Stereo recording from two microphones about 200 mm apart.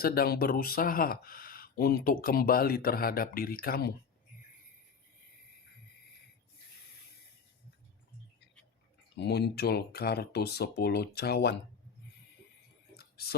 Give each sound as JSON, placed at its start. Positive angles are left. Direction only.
{"t": 0.0, "sound": "speech", "side_deg": 50}
{"t": 9.1, "sound": "speech", "side_deg": 55}
{"t": 13.0, "sound": "a sound", "side_deg": 50}